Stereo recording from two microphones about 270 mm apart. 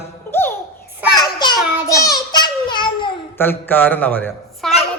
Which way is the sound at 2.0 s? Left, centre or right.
Centre.